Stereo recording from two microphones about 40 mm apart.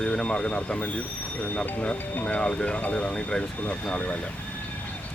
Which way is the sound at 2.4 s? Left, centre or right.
Left.